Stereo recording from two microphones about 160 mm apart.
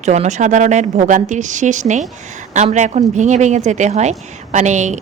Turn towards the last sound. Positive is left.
turn(degrees=-50)  # may be behind; listen again after turning